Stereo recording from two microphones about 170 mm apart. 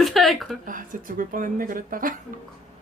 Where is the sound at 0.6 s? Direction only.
55° right (ahead or behind).